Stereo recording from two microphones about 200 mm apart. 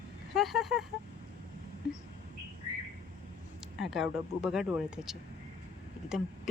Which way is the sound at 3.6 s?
Centre (ahead or behind).